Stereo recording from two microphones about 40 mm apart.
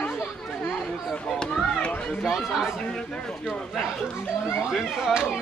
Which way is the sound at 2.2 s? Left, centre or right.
Centre.